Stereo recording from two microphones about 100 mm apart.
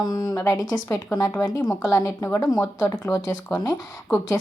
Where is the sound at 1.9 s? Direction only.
30° left (ahead or behind).